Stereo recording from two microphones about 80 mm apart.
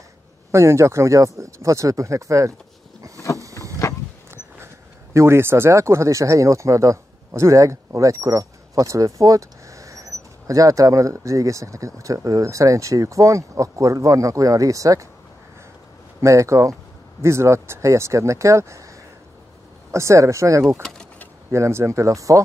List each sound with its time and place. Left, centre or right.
0.5 s speech: right
3.8 s wild animals: left
5.1 s speech: right
16.2 s speech: right
19.9 s speech: right